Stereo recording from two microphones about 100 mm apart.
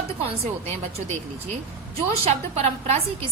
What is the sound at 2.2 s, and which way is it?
A woman's voice, 90° right.